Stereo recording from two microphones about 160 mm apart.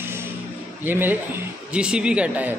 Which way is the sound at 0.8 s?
10° right (ahead or behind).